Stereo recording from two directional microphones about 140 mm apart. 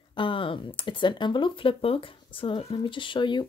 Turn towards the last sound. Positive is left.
turn(degrees=35)  # may be behind; listen again after turning